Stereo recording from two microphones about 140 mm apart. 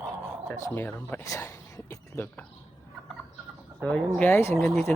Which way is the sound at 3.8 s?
5° left (ahead or behind).